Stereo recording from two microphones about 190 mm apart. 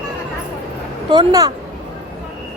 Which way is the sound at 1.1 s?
20° right (ahead or behind).